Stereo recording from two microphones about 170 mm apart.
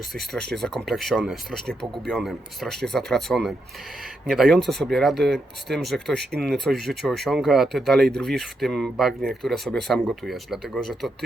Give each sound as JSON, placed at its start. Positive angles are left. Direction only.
{"t": 0.1, "sound": "speech", "side_deg": 0}